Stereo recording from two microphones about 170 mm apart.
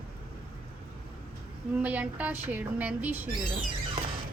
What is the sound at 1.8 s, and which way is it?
A woman's voice, 10° right (ahead or behind).